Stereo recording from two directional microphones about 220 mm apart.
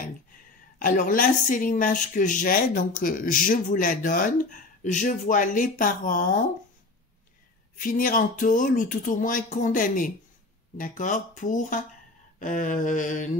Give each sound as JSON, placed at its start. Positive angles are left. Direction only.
{"t": 0.7, "sound": "a woman's voice", "side_deg": 35}
{"t": 7.8, "sound": "a woman's voice", "side_deg": 40}